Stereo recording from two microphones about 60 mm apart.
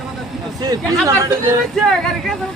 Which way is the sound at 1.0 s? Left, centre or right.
Right.